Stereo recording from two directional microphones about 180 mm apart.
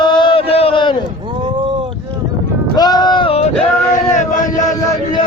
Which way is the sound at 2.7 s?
20° left (ahead or behind).